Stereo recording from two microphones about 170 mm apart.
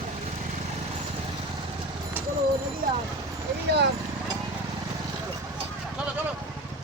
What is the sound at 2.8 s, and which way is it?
Speech, 55° right (ahead or behind).